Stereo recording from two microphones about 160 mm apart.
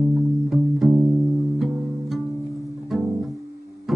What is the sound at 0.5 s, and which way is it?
Music, centre (ahead or behind).